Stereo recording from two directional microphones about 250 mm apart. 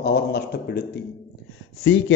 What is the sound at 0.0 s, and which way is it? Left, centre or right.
A man's voice, left.